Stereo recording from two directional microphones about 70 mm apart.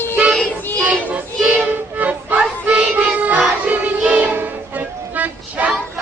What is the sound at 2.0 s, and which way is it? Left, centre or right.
Music, right.